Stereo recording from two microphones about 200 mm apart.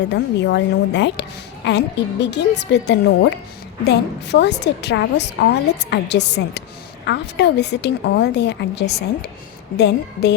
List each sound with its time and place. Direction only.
0.1 s a woman's voice: 60° left (ahead or behind)